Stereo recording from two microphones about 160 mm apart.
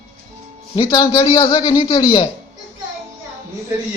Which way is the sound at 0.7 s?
25° left (ahead or behind).